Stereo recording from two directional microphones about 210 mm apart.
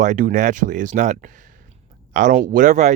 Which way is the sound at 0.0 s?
40° right (ahead or behind).